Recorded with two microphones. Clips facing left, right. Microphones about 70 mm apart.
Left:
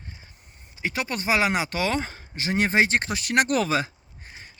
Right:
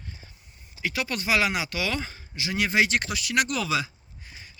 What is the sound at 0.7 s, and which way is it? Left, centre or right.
Speech, left.